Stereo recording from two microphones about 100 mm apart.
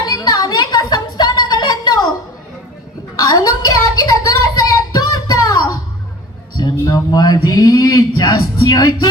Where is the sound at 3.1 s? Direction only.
40° left (ahead or behind).